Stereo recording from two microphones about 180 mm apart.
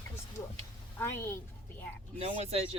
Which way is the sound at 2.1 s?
35° right (ahead or behind).